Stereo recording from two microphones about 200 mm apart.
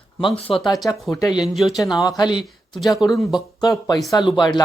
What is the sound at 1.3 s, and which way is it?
Speech, centre (ahead or behind).